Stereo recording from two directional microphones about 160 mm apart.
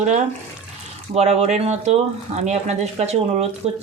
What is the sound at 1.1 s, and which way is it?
Speech, 40° right (ahead or behind).